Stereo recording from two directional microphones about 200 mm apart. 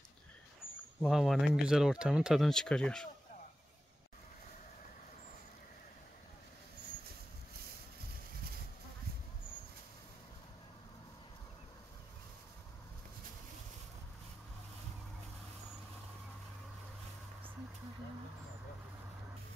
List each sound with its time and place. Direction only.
1.0 s speech: centre (ahead or behind)